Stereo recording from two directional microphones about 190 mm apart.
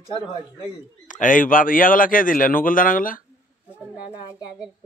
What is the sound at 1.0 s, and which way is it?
A man's voice, 45° left (ahead or behind).